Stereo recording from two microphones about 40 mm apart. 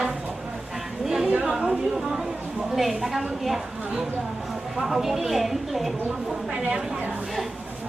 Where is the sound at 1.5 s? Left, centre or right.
Right.